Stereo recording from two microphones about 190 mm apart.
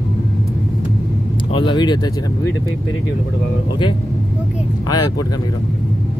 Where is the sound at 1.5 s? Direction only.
25° left (ahead or behind).